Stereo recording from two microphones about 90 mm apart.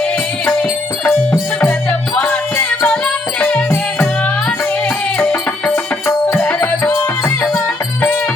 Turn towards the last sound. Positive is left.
turn(degrees=20)  # may be behind; listen again after turning